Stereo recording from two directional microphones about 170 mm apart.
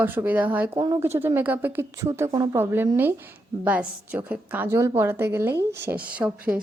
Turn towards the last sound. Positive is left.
turn(degrees=-5)  # may be behind; listen again after turning